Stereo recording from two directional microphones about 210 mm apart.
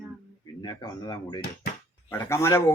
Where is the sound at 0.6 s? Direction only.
20° left (ahead or behind).